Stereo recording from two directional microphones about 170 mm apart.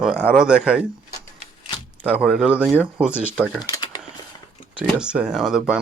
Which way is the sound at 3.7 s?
20° left (ahead or behind).